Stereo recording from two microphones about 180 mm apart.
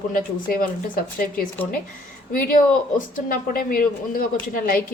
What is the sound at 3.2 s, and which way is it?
A woman's voice, 50° left (ahead or behind).